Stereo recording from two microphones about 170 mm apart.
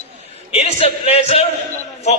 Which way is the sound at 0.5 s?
35° left (ahead or behind).